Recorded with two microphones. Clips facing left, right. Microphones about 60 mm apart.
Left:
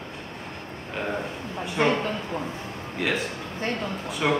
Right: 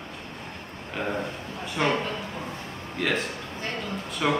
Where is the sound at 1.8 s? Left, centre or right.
Left.